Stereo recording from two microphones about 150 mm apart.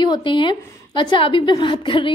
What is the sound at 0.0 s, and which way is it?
A woman's voice, 30° left (ahead or behind).